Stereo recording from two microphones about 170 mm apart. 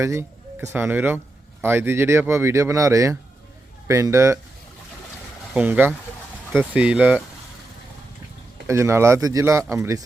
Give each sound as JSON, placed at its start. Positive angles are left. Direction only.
{"t": 0.0, "sound": "speech", "side_deg": -15}
{"t": 5.5, "sound": "speech", "side_deg": -10}
{"t": 8.6, "sound": "speech", "side_deg": -15}